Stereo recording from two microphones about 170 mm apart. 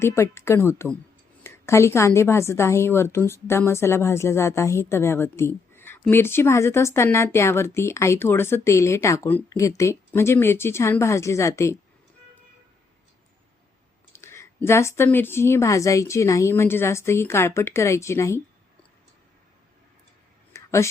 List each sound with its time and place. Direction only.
0.0 s a woman's voice: 15° left (ahead or behind)
14.1 s a woman's voice: 15° left (ahead or behind)
20.5 s a sound: 15° left (ahead or behind)